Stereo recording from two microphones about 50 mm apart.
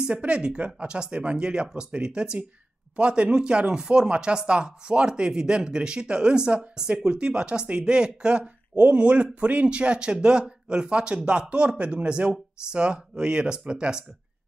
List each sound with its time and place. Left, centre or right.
0.1 s speech: right